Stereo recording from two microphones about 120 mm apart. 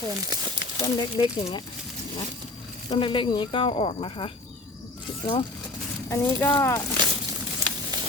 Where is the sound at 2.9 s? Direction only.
45° left (ahead or behind).